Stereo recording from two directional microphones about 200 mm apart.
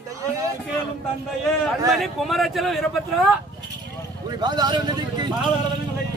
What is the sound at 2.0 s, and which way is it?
Speech, centre (ahead or behind).